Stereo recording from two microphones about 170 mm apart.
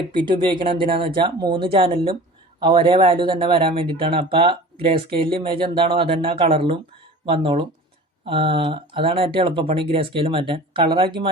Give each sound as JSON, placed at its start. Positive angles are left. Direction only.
{"t": 0.3, "sound": "speech", "side_deg": -30}